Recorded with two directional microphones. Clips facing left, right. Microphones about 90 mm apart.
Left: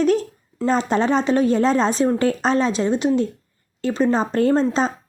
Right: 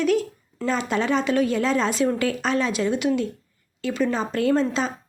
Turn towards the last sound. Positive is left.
turn(degrees=35)  # may be behind; listen again after turning